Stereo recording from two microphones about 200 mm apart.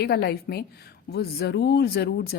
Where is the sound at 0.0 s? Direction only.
55° left (ahead or behind).